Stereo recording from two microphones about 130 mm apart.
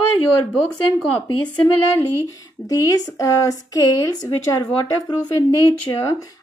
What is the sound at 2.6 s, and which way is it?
Speech, 25° left (ahead or behind).